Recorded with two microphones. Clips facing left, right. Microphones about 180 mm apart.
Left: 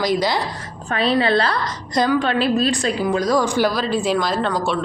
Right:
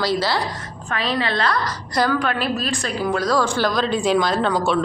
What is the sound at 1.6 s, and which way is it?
A woman's voice, 20° left (ahead or behind).